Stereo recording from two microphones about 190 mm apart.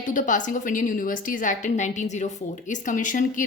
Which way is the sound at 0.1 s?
45° left (ahead or behind).